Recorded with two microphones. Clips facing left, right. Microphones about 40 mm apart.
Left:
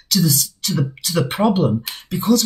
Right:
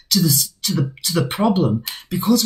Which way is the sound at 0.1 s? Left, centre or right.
Centre.